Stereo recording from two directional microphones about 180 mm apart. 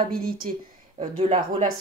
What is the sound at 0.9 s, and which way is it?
Speech, 30° right (ahead or behind).